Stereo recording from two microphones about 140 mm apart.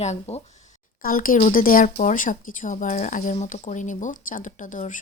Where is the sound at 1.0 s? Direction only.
85° left.